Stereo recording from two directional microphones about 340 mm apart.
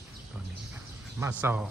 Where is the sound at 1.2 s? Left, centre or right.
Centre.